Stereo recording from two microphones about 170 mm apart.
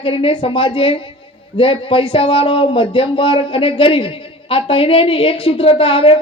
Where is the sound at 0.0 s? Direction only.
30° left (ahead or behind).